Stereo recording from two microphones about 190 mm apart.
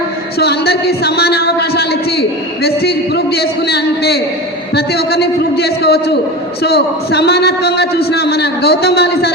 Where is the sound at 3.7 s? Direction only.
60° left (ahead or behind).